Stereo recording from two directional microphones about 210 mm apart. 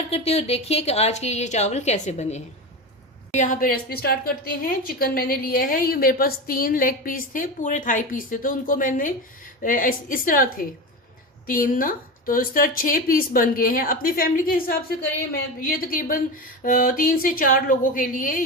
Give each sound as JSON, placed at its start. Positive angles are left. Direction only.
{"t": 0.1, "sound": "a woman's voice", "side_deg": 30}